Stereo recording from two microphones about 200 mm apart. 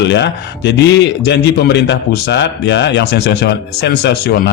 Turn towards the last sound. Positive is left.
turn(degrees=55)  # may be behind; listen again after turning